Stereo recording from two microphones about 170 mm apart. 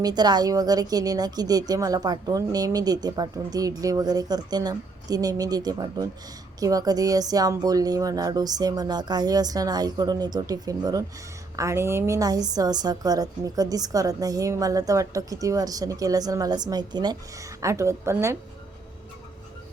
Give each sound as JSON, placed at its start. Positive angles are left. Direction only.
{"t": 0.0, "sound": "a woman's voice", "side_deg": -25}